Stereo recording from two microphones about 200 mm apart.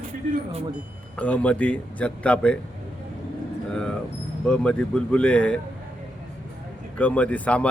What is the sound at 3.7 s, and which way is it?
A man's voice, 5° left (ahead or behind).